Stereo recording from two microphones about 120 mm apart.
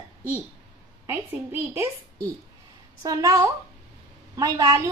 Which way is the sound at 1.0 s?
20° right (ahead or behind).